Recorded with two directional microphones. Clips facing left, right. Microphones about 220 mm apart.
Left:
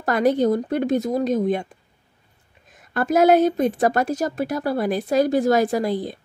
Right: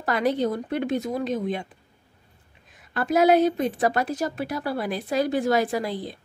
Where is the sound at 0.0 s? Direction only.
45° left (ahead or behind).